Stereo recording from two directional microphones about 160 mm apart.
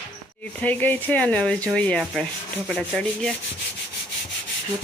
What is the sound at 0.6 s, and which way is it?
Rub, 10° left (ahead or behind).